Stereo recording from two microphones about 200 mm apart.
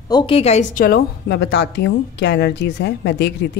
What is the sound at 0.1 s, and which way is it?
A woman's voice, 25° left (ahead or behind).